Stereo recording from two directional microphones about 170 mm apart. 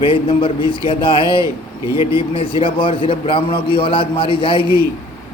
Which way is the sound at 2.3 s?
30° left (ahead or behind).